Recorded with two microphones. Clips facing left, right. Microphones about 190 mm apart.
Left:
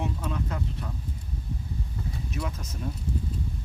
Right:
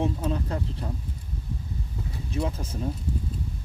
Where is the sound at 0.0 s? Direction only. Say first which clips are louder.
Right 5 dB; 30° right (ahead or behind).